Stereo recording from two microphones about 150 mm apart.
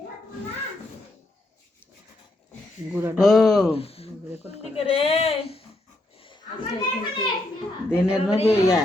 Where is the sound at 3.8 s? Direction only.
40° left (ahead or behind).